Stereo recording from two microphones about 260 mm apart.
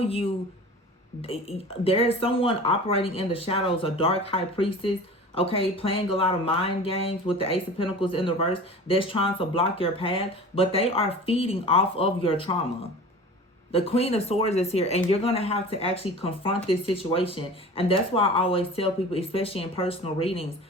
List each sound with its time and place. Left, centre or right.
0.0 s speech: left
13.7 s speech: left